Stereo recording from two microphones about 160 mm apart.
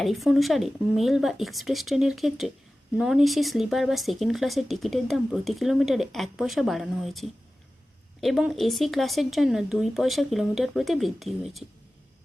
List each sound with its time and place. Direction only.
0.0 s speech: centre (ahead or behind)